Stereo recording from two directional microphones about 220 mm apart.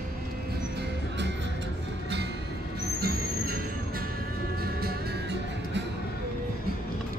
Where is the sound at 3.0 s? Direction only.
45° right (ahead or behind).